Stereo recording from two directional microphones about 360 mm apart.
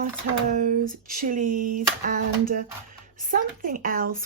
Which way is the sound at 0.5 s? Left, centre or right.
Right.